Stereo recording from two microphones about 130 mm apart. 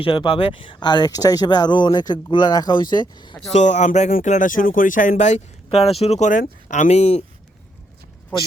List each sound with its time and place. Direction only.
0.0 s speech: 45° left (ahead or behind)
3.5 s speech: 65° left (ahead or behind)
5.6 s speech: 50° left (ahead or behind)